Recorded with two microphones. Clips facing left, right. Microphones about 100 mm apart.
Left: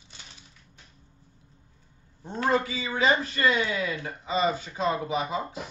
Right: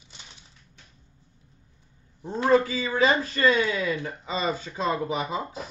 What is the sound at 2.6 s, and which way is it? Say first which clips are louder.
Speech: right 3 dB; 35° right (ahead or behind).